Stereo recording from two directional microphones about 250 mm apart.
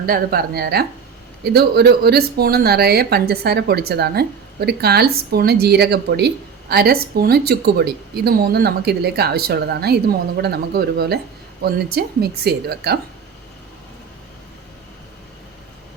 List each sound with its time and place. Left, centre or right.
0.0 s speech: right